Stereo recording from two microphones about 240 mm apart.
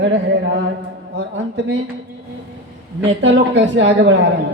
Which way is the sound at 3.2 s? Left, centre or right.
Right.